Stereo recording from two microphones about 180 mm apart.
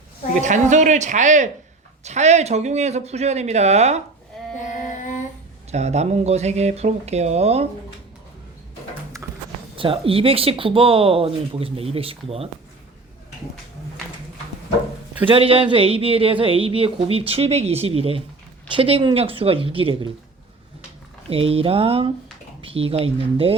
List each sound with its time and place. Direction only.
0.3 s speech: 40° right (ahead or behind)
4.9 s a sound: 45° left (ahead or behind)
5.7 s speech: 40° right (ahead or behind)
9.2 s a sound: 20° right (ahead or behind)
9.7 s speech: 30° right (ahead or behind)
15.3 s speech: 30° right (ahead or behind)
21.2 s speech: 30° right (ahead or behind)